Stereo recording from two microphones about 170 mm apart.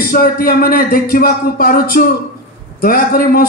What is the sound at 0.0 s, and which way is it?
A man's voice, 60° left (ahead or behind).